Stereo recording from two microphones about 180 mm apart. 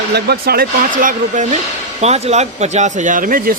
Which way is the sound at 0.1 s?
60° right (ahead or behind).